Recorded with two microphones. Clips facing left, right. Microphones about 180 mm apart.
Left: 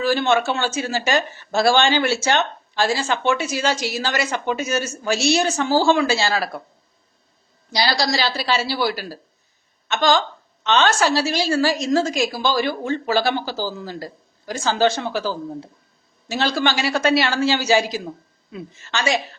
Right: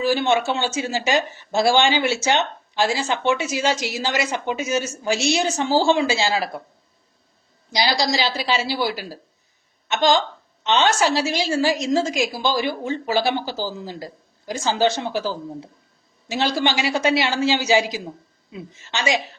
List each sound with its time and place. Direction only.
0.0 s speech: 15° right (ahead or behind)
7.7 s a woman's voice: 20° right (ahead or behind)